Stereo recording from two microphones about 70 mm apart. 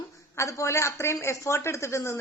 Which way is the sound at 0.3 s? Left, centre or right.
Left.